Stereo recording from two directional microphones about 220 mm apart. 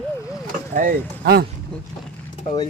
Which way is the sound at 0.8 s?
40° right (ahead or behind).